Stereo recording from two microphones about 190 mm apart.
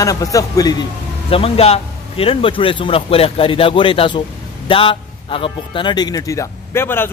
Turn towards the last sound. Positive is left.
turn(degrees=10)  # may be behind; listen again after turning